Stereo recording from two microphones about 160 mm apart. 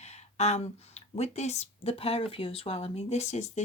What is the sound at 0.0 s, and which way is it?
Speech, 45° left (ahead or behind).